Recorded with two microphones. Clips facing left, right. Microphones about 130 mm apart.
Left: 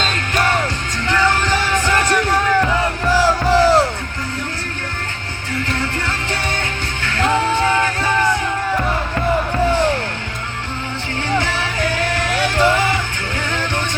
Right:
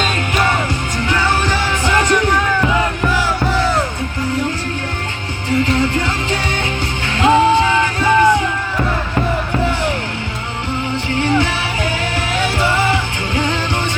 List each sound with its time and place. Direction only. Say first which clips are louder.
1.0 s music: left 1 dB; 15° right (ahead or behind)
3.2 s music: left 4 dB; 35° left (ahead or behind)
5.5 s music: right 7 dB; 15° right (ahead or behind)
11.2 s music: right 3 dB; 15° right (ahead or behind)